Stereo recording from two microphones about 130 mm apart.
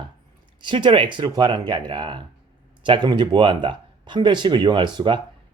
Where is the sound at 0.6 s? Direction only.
40° right (ahead or behind).